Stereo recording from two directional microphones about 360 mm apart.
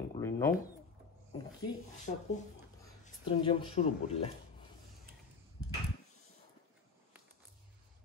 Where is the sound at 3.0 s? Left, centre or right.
Centre.